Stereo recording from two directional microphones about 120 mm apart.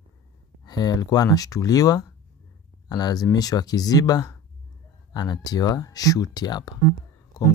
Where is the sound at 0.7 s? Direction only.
35° left (ahead or behind).